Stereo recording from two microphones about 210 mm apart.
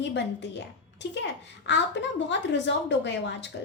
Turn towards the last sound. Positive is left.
turn(degrees=55)  # may be behind; listen again after turning